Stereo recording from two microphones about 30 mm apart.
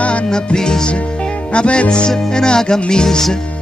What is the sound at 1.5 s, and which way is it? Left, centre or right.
Music, left.